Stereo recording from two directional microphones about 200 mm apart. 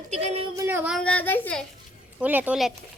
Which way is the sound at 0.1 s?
35° right (ahead or behind).